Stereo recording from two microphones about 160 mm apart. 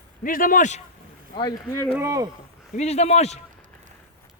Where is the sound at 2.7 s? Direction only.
45° left (ahead or behind).